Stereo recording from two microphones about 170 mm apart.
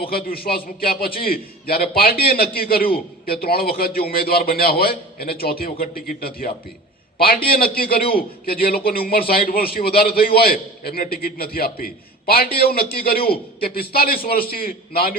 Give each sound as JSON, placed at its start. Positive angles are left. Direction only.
{"t": 0.0, "sound": "a man's voice", "side_deg": 60}